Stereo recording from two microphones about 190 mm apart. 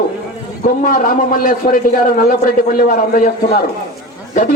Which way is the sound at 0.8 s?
45° left (ahead or behind).